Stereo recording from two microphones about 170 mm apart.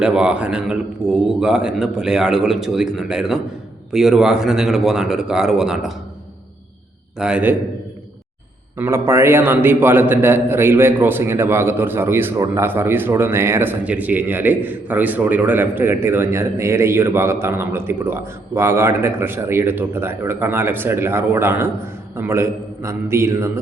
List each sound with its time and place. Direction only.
0.0 s speech: 5° right (ahead or behind)
7.2 s a man's voice: 5° right (ahead or behind)
8.8 s a man's voice: 15° right (ahead or behind)